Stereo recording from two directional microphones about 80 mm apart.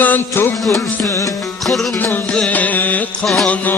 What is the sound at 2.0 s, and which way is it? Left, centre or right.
Music, left.